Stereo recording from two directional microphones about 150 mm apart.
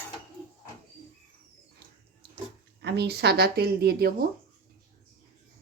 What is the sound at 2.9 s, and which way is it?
Speech, 90° right.